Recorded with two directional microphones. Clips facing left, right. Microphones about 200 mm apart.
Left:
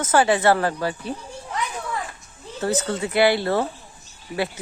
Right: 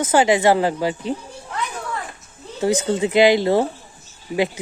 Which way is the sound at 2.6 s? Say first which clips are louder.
Right 5 dB; 15° right (ahead or behind).